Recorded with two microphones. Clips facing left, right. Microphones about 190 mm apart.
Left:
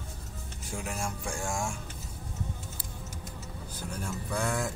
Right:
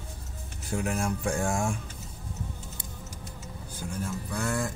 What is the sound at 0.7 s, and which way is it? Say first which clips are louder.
Speech: right 7 dB; 60° right (ahead or behind).